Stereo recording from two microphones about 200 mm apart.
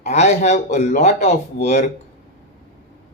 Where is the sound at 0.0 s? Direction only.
35° left (ahead or behind).